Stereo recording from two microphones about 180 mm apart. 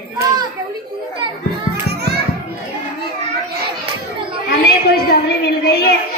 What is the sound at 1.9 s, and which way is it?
Children playing, 65° right (ahead or behind).